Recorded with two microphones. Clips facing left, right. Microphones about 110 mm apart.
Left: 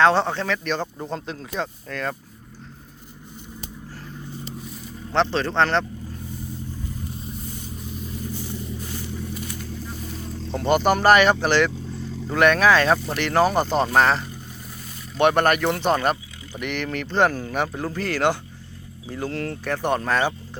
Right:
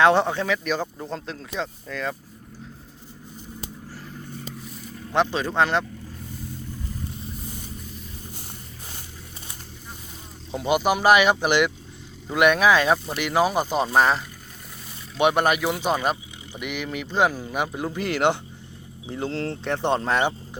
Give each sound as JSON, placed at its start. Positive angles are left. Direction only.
{"t": 0.0, "sound": "speech", "side_deg": -15}
{"t": 5.1, "sound": "speech", "side_deg": -10}
{"t": 10.5, "sound": "speech", "side_deg": -5}